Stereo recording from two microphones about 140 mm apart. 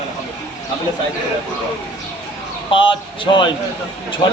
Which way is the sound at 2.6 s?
35° left (ahead or behind).